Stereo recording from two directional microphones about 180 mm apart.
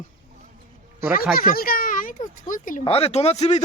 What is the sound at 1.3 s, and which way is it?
Speech, 55° left (ahead or behind).